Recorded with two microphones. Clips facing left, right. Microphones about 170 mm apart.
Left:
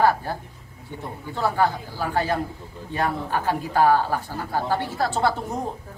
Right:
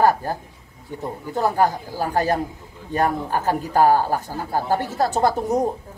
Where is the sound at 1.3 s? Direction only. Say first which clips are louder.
Right 3 dB; 40° right (ahead or behind).